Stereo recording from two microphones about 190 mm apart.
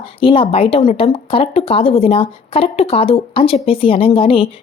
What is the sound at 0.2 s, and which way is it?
Speech, 30° left (ahead or behind).